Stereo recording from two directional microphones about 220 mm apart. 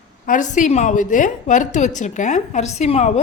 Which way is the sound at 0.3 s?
35° left (ahead or behind).